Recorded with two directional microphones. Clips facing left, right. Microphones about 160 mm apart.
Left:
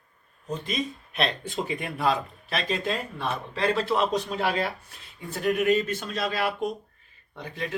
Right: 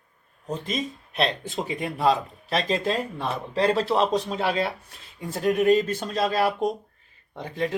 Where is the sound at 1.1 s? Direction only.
35° right (ahead or behind).